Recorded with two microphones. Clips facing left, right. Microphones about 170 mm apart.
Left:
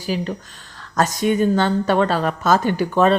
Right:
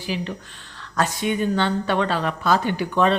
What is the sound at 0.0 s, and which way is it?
A woman's voice, 40° left (ahead or behind).